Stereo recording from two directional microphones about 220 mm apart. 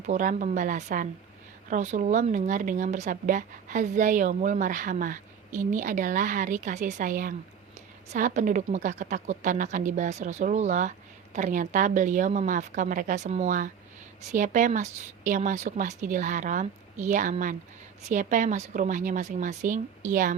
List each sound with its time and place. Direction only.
0.0 s speech: 35° right (ahead or behind)